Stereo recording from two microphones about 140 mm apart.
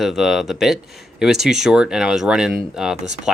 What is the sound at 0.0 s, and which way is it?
Speech, centre (ahead or behind).